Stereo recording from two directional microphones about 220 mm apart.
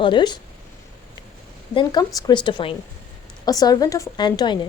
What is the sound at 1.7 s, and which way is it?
Speech, 20° left (ahead or behind).